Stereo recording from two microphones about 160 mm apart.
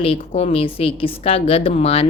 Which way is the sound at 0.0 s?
40° left (ahead or behind).